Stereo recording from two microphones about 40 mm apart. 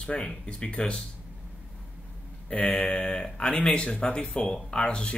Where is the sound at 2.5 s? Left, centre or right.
Left.